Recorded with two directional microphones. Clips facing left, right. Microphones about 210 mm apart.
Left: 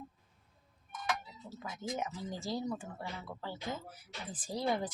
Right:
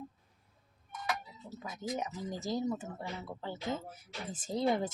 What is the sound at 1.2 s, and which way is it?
Speech, 20° right (ahead or behind).